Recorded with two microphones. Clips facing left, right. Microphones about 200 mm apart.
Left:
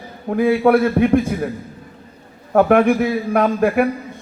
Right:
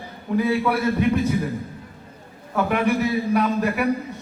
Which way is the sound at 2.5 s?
50° left (ahead or behind).